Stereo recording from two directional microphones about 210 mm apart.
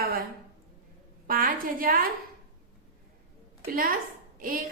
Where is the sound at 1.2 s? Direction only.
45° right (ahead or behind).